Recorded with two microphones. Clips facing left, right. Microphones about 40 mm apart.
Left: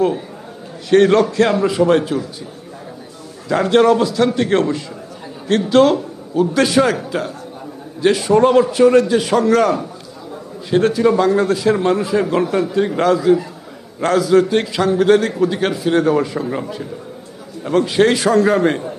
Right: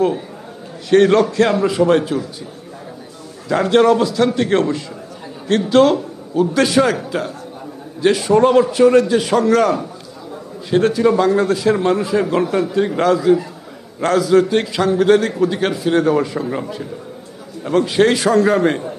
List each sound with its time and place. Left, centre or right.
0.9 s a man's voice: centre
3.5 s a man's voice: centre